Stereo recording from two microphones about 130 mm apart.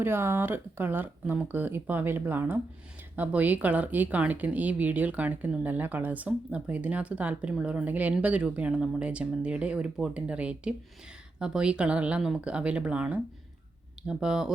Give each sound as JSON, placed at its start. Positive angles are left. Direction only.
{"t": 0.0, "sound": "speech", "side_deg": -20}